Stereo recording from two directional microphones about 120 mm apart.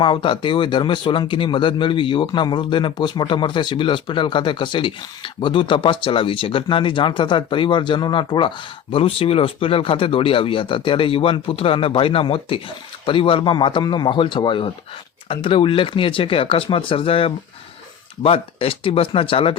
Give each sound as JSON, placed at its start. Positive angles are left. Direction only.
{"t": 0.0, "sound": "speech", "side_deg": 45}